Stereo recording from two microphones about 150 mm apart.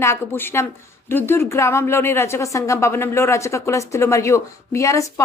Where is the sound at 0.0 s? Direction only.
15° left (ahead or behind).